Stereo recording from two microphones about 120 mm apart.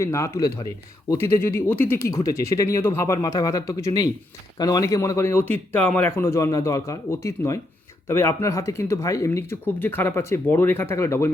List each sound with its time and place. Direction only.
0.0 s speech: 25° left (ahead or behind)